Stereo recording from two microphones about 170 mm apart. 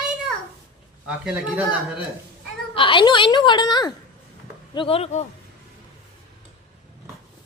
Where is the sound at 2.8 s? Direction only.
30° left (ahead or behind).